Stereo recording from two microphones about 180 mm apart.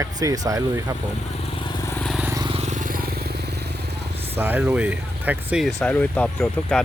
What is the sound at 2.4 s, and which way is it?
Vehicle, 35° right (ahead or behind).